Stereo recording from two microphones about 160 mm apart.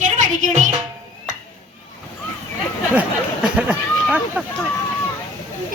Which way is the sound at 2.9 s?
10° right (ahead or behind).